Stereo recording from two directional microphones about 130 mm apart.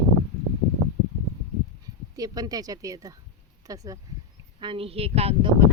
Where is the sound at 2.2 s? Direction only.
30° right (ahead or behind).